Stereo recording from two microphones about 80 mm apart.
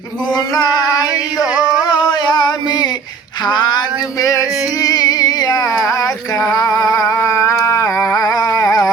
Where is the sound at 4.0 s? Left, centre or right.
Left.